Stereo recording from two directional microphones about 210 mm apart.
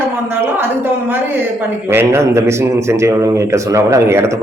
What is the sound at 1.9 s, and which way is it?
Speech, 10° right (ahead or behind).